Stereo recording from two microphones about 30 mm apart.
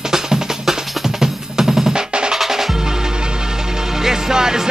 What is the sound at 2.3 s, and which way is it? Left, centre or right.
Music, centre.